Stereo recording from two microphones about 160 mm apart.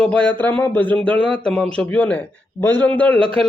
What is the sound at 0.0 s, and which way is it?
Speech, 10° left (ahead or behind).